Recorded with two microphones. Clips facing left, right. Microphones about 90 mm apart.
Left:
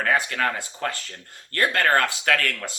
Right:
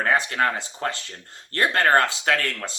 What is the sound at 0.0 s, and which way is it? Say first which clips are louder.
Speech: right 1 dB; 25° right (ahead or behind).